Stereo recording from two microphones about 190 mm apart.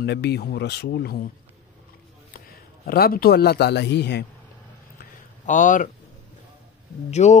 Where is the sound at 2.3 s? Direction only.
50° left (ahead or behind).